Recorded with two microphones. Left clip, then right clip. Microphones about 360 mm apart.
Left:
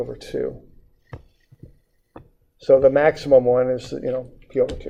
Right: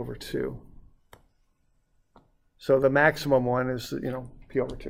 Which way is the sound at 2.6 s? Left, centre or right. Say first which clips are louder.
Left 8 dB; right.